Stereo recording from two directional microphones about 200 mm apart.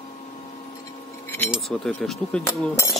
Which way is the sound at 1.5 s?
Centre (ahead or behind).